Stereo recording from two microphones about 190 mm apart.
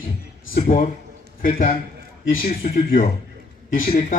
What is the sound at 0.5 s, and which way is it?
A man's voice, 50° left (ahead or behind).